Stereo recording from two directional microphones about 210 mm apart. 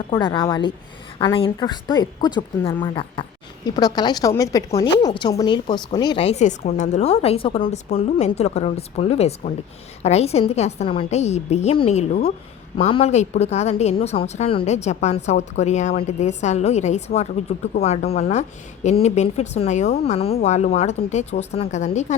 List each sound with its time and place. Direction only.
0.1 s a woman's voice: 20° left (ahead or behind)